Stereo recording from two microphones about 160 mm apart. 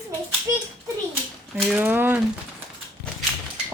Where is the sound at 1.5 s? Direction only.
10° right (ahead or behind).